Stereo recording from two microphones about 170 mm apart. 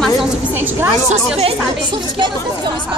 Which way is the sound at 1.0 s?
40° right (ahead or behind).